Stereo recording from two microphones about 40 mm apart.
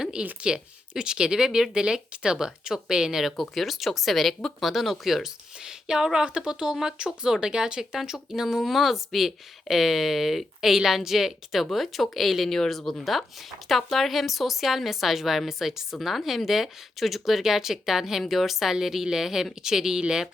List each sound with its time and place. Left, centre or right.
0.4 s speech: centre
3.5 s speech: centre
5.2 s speech: centre